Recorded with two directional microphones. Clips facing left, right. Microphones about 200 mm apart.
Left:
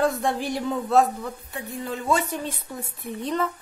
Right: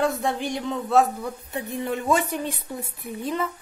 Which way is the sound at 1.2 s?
20° right (ahead or behind).